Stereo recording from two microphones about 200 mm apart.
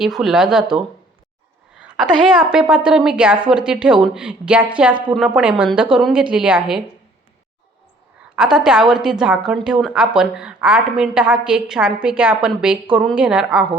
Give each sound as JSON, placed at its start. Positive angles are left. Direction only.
{"t": 0.0, "sound": "a woman's voice", "side_deg": 0}
{"t": 1.7, "sound": "a sound", "side_deg": -5}
{"t": 2.2, "sound": "a woman's voice", "side_deg": -5}
{"t": 8.4, "sound": "a woman's voice", "side_deg": -5}